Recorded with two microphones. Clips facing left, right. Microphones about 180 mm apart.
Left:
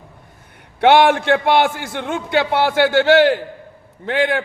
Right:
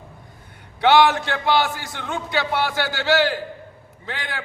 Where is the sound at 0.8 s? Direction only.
60° left (ahead or behind).